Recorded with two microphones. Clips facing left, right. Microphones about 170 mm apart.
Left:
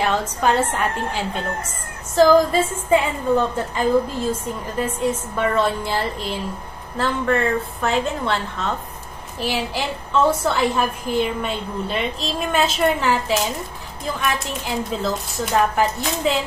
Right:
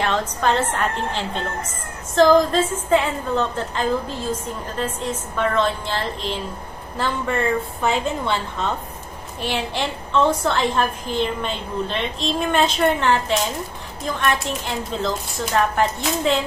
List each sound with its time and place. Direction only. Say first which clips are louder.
0.0 s a woman's voice: left 1 dB; 10° left (ahead or behind)
7.8 s a woman's voice: left 1 dB; centre (ahead or behind)